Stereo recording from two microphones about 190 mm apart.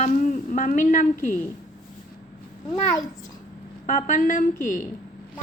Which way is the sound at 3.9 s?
40° left (ahead or behind).